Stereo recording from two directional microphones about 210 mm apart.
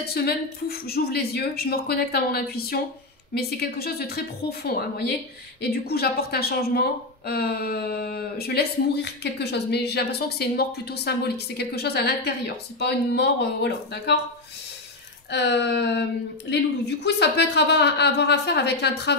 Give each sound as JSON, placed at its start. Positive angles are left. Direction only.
{"t": 0.0, "sound": "a woman's voice", "side_deg": 50}
{"t": 15.3, "sound": "a woman's voice", "side_deg": 55}